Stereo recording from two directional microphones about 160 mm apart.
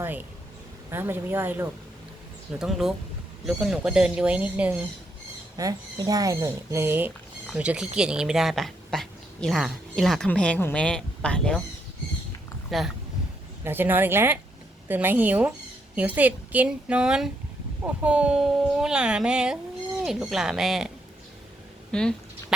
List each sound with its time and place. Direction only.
0.0 s speech: 10° right (ahead or behind)
2.6 s speech: 5° right (ahead or behind)
5.5 s speech: 20° right (ahead or behind); by 11.6 s 5° left (ahead or behind)
12.7 s speech: centre (ahead or behind)
13.7 s speech: 10° right (ahead or behind)
21.9 s a sound: 5° left (ahead or behind)